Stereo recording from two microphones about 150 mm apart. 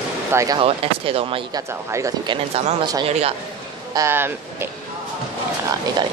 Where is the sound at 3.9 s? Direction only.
20° right (ahead or behind).